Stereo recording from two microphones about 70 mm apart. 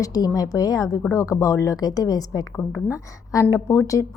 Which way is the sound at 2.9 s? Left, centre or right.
Left.